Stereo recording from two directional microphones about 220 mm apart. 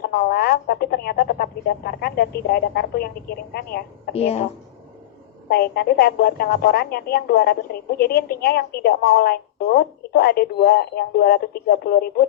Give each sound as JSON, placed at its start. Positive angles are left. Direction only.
{"t": 0.0, "sound": "a woman's voice", "side_deg": 45}
{"t": 4.1, "sound": "speech", "side_deg": 30}
{"t": 5.5, "sound": "a woman's voice", "side_deg": 45}